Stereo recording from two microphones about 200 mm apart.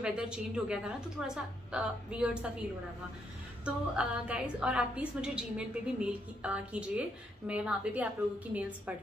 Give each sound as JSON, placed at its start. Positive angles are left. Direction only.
{"t": 0.0, "sound": "a woman's voice", "side_deg": -5}
{"t": 3.6, "sound": "a woman's voice", "side_deg": -5}